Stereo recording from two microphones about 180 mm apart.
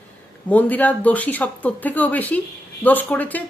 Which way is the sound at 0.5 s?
10° left (ahead or behind).